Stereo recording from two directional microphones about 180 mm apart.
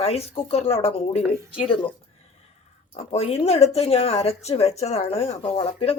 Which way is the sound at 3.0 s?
35° left (ahead or behind).